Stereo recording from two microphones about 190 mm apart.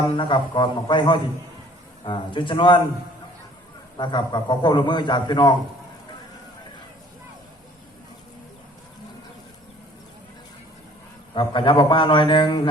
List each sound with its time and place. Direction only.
0.2 s a man's voice: 25° left (ahead or behind)
3.9 s a man's voice: 25° left (ahead or behind)
11.3 s a man's voice: 25° left (ahead or behind)